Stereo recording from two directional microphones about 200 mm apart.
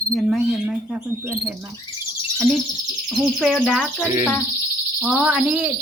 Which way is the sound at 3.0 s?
Centre (ahead or behind).